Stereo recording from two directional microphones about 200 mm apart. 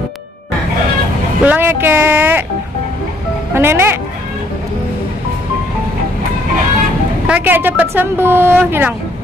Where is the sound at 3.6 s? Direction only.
10° right (ahead or behind).